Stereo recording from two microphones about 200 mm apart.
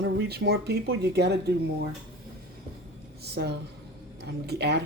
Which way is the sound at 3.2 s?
55° right (ahead or behind).